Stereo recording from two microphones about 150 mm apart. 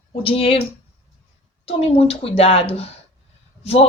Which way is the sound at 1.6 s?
40° left (ahead or behind).